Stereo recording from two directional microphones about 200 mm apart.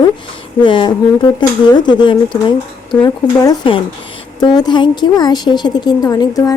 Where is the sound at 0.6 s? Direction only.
25° left (ahead or behind).